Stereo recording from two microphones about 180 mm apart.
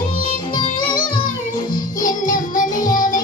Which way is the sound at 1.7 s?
45° left (ahead or behind).